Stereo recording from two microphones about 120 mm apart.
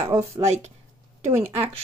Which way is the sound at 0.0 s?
25° right (ahead or behind).